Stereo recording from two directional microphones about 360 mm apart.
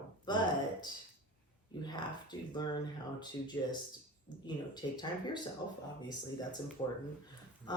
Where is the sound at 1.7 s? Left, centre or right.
Centre.